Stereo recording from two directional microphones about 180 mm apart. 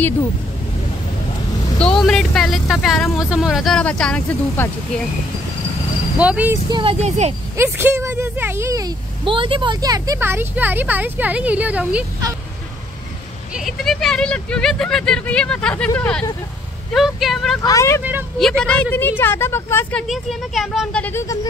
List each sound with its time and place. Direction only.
2.0 s speech: centre (ahead or behind)
6.2 s speech: 10° right (ahead or behind)
6.7 s speech: 30° right (ahead or behind)
7.5 s speech: 15° right (ahead or behind)
13.5 s a woman's voice: centre (ahead or behind)
17.6 s a woman's voice: 15° left (ahead or behind)
18.4 s a woman's voice: 5° left (ahead or behind)